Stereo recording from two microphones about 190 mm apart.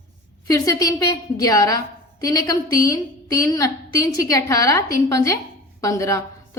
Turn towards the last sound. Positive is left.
turn(degrees=15)  # may be behind; listen again after turning